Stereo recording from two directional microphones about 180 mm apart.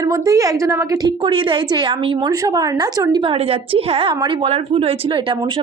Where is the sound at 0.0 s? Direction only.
20° right (ahead or behind).